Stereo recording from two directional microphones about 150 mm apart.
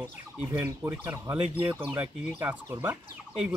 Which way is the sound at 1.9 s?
15° right (ahead or behind).